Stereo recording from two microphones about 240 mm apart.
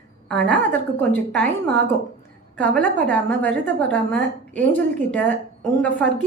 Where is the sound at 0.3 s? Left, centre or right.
Centre.